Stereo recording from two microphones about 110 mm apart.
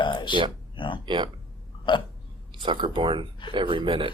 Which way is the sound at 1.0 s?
45° right (ahead or behind).